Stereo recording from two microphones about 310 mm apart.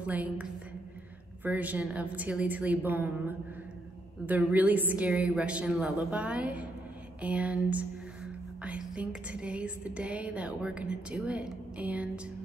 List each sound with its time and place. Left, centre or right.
0.0 s a woman's voice: centre
4.3 s a woman's voice: centre